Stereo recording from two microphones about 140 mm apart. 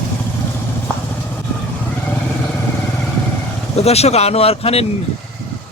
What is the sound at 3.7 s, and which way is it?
Speech, 50° left (ahead or behind).